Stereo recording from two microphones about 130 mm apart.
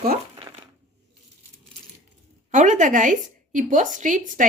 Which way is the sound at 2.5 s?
70° right (ahead or behind).